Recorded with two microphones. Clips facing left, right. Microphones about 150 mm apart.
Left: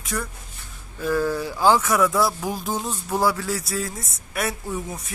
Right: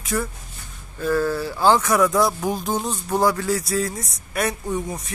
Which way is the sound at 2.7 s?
20° right (ahead or behind).